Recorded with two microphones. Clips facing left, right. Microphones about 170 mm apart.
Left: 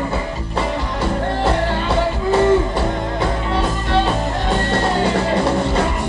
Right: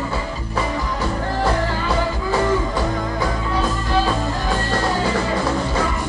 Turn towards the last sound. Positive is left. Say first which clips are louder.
# left 3 dB
turn(degrees=25)  # may be behind; listen again after turning